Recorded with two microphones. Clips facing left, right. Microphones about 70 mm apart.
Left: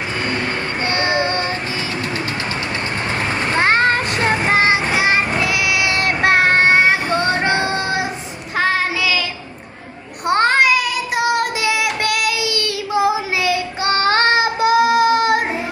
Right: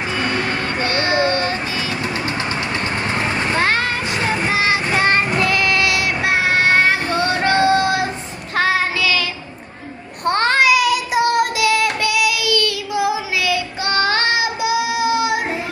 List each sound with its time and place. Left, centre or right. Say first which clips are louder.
0.9 s child singing: right 1 dB; left
3.6 s splash: left 7 dB; left
4.4 s music: left 3 dB; left
4.9 s child singing: even; centre
5.9 s music: left 3 dB; left
6.7 s child singing: left 1 dB; left
8.5 s child singing: even; centre
10.2 s child singing: left 1 dB; centre
11.5 s child singing: right 3 dB; left
12.0 s child singing: right 1 dB; left
12.3 s child singing: right 2 dB; left